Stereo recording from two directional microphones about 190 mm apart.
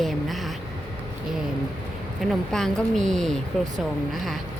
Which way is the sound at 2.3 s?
Centre (ahead or behind).